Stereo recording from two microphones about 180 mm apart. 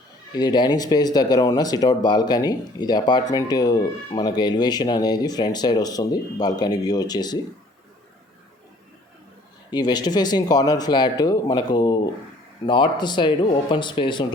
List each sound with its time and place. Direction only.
0.3 s speech: 25° left (ahead or behind)
9.6 s speech: 25° left (ahead or behind)